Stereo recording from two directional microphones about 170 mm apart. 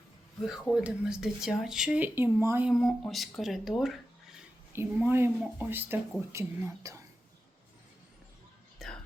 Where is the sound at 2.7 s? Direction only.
Centre (ahead or behind).